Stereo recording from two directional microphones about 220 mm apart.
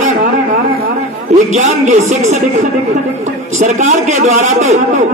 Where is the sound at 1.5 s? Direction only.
30° right (ahead or behind).